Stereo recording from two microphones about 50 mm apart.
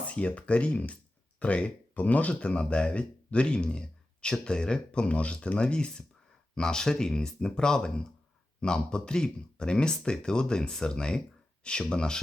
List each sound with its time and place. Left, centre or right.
0.0 s speech: left